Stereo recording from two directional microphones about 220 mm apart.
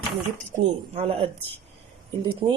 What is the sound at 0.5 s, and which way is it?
Speech, 30° right (ahead or behind).